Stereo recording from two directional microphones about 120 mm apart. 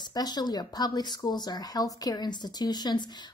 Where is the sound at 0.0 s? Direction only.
35° left (ahead or behind).